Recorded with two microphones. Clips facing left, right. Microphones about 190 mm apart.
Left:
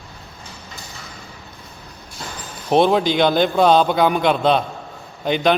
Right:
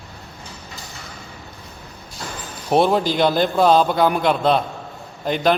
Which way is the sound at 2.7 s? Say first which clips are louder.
Left 1 dB; 5° right (ahead or behind).